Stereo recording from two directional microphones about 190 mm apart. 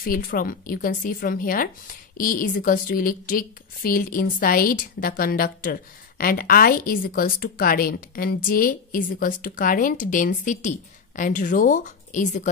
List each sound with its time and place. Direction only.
0.0 s speech: 50° left (ahead or behind)